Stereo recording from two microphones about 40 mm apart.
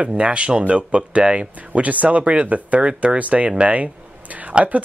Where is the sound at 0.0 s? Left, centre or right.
Right.